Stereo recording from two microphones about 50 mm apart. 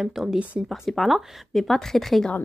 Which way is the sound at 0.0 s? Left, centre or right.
Centre.